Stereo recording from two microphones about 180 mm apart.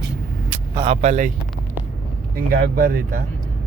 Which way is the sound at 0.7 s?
30° right (ahead or behind).